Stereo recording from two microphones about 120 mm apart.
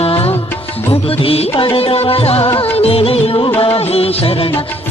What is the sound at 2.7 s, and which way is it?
Music of bollywood, 55° left (ahead or behind).